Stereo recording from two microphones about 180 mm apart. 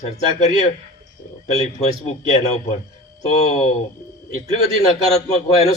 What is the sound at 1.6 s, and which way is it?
A man's voice, 40° left (ahead or behind).